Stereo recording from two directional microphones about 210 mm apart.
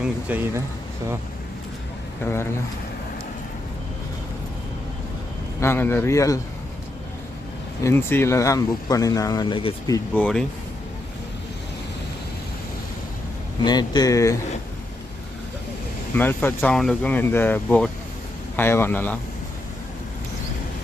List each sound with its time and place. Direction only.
0.0 s speech: 10° right (ahead or behind)
5.5 s speech: 10° left (ahead or behind)
7.9 s speech: 10° left (ahead or behind)
10.2 s speech: 5° left (ahead or behind)
13.7 s speech: 20° left (ahead or behind)
16.1 s speech: 10° left (ahead or behind)